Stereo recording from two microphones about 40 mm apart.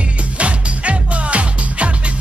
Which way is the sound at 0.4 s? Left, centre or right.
Right.